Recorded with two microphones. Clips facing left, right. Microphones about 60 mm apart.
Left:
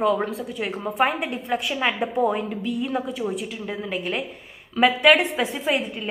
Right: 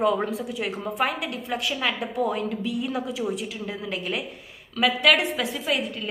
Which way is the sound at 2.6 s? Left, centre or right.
Centre.